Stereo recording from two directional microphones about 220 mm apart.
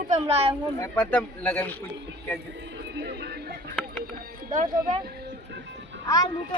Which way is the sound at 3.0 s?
45° right (ahead or behind).